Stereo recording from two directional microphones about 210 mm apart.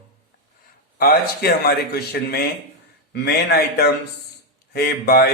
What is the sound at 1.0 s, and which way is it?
Speech, 45° left (ahead or behind).